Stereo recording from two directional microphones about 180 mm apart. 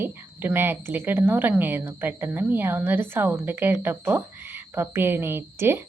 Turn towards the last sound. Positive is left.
turn(degrees=-15)  # may be behind; listen again after turning